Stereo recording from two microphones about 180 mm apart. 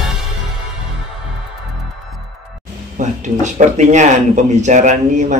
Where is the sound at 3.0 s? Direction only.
40° right (ahead or behind).